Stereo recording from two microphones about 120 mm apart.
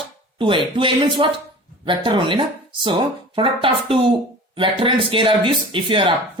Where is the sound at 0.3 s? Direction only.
45° right (ahead or behind).